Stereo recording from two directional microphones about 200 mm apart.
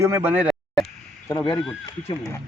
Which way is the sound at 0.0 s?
10° right (ahead or behind).